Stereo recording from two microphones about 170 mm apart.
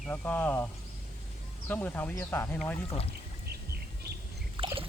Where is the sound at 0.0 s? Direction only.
5° left (ahead or behind).